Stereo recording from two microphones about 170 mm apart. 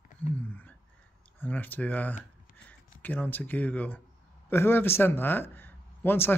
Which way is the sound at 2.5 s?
50° left (ahead or behind).